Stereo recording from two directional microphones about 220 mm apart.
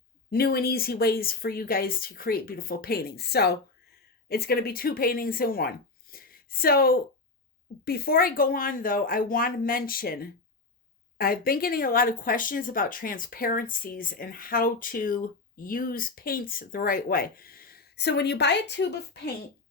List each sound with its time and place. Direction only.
0.3 s speech: 45° left (ahead or behind)